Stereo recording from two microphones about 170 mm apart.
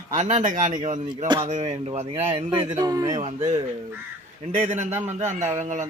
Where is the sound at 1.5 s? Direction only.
40° right (ahead or behind); by 3.2 s 20° right (ahead or behind).